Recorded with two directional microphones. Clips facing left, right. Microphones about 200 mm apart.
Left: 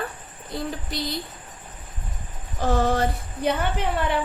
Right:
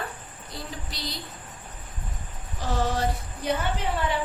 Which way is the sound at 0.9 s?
55° left (ahead or behind).